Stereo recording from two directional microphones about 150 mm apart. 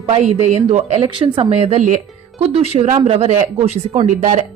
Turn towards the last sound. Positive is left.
turn(degrees=-55)  # may be behind; listen again after turning